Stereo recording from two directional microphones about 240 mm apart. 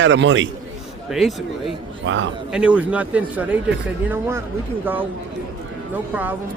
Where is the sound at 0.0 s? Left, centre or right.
Right.